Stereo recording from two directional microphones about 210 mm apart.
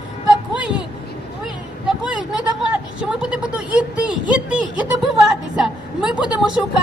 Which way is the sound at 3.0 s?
5° right (ahead or behind).